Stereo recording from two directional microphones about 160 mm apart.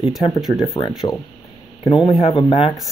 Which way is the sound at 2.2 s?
40° left (ahead or behind).